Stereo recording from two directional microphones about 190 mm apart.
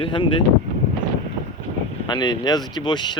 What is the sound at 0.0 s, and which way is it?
Speech, 25° left (ahead or behind).